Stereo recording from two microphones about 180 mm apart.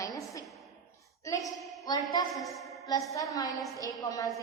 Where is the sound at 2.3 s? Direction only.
Centre (ahead or behind).